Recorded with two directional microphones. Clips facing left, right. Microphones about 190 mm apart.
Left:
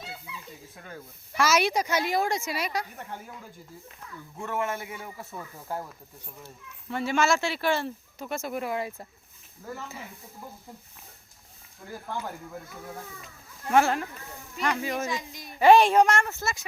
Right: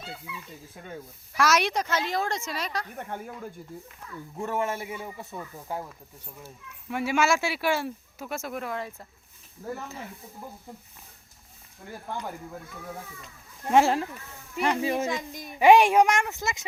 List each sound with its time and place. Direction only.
0.8 s a man's voice: 20° right (ahead or behind)
1.4 s speech: centre (ahead or behind)
3.0 s speech: 55° right (ahead or behind)
4.4 s a man's voice: 30° right (ahead or behind)
5.2 s speech: 5° right (ahead or behind)
13.7 s a man's voice: 25° right (ahead or behind)
15.0 s speech: 50° right (ahead or behind)
15.5 s speech: 15° right (ahead or behind)